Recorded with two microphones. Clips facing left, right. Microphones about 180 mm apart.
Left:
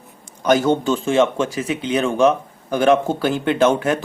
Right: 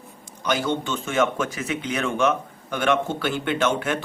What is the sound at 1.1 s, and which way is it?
Speech, 30° left (ahead or behind).